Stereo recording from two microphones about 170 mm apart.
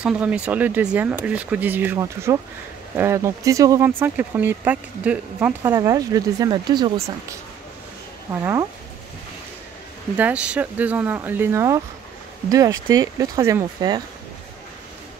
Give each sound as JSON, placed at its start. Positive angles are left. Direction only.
{"t": 0.0, "sound": "speech", "side_deg": -5}
{"t": 10.1, "sound": "speech", "side_deg": -10}